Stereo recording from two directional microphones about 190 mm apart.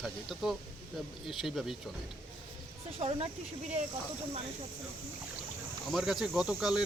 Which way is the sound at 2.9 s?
30° right (ahead or behind).